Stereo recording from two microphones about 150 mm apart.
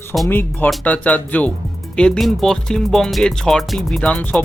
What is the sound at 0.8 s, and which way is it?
Speech, 10° left (ahead or behind).